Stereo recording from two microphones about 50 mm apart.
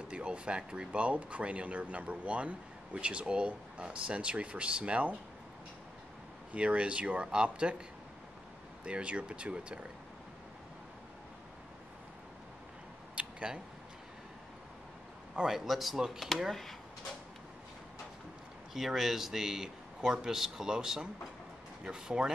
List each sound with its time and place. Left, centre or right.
0.1 s speech: right
6.5 s speech: right
8.8 s speech: right
13.1 s a sound: right
15.3 s speech: centre
18.7 s speech: centre